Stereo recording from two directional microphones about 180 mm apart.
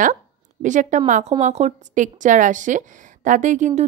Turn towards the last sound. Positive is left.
turn(degrees=-40)  # may be behind; listen again after turning